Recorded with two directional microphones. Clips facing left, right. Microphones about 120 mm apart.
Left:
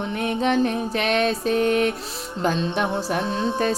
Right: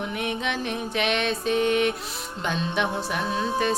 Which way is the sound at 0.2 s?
40° left (ahead or behind).